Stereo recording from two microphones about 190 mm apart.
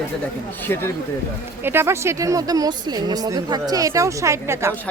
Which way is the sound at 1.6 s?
10° right (ahead or behind).